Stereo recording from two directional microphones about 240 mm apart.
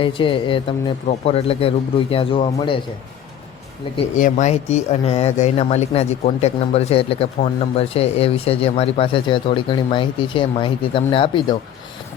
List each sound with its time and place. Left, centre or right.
0.0 s speech: left
3.9 s speech: left